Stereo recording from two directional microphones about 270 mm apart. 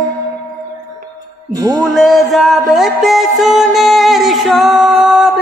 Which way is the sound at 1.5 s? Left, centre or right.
Centre.